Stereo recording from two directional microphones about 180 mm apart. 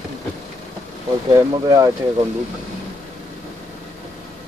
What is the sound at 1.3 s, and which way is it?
Speech, 20° right (ahead or behind).